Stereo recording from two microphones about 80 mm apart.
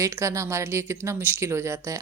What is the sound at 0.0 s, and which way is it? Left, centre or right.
Speech, right.